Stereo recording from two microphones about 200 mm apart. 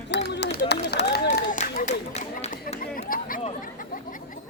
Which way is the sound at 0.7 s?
60° left (ahead or behind).